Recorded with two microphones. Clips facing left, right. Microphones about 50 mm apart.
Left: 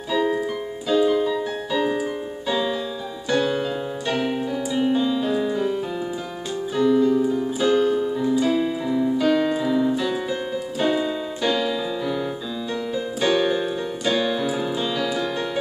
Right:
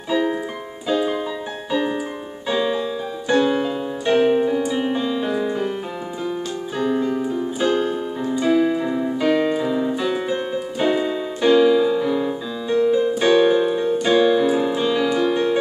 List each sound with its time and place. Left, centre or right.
0.8 s keyboard: centre
2.5 s piano: centre
3.3 s music: right
4.7 s piano: centre
6.8 s piano: right
7.3 s keyboard: right
12.7 s keyboard: right
14.5 s music: right